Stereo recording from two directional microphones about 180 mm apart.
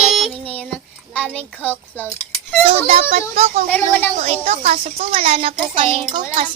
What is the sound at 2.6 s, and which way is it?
A child's voice, 35° right (ahead or behind).